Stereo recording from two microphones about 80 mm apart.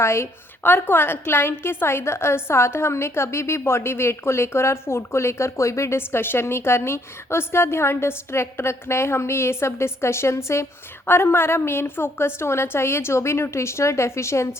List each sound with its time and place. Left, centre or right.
0.0 s a woman's voice: left